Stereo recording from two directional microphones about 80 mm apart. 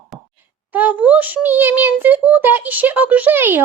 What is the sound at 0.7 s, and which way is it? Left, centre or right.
A child's voice, right.